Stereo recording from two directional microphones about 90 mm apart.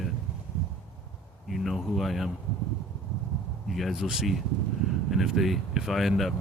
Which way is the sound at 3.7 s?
Centre (ahead or behind).